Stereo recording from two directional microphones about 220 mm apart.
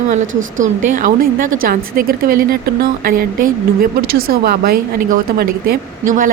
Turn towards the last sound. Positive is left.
turn(degrees=-40)  # may be behind; listen again after turning